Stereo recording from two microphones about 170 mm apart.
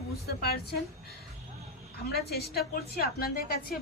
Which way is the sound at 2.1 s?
70° left (ahead or behind).